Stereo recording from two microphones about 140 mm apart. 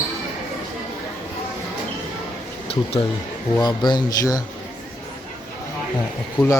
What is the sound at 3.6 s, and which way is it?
Speech, 30° left (ahead or behind).